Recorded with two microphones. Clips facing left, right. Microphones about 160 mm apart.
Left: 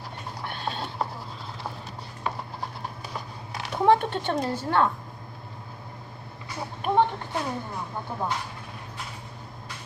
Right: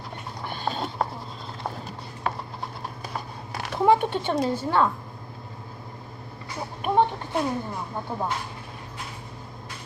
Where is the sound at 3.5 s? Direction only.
10° right (ahead or behind).